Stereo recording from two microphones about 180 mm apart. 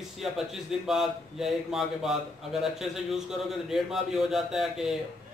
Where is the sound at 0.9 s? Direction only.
Centre (ahead or behind).